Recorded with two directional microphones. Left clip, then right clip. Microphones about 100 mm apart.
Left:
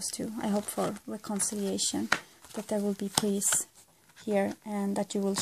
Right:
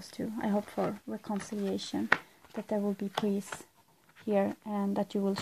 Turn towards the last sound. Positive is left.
turn(degrees=5)  # may be behind; listen again after turning